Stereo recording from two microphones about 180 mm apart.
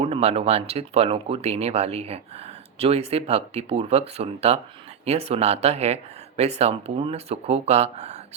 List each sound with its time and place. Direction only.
0.0 s speech: 35° right (ahead or behind)